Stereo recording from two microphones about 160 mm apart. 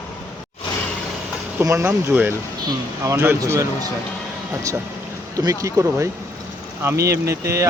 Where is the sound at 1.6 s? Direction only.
15° right (ahead or behind).